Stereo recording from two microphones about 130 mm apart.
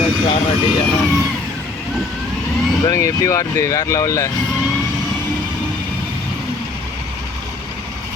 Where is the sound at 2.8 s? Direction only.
25° left (ahead or behind).